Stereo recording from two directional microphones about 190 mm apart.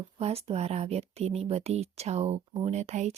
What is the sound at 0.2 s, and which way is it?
Speech, 30° right (ahead or behind).